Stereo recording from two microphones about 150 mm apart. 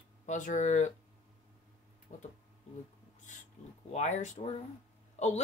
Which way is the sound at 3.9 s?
50° left (ahead or behind).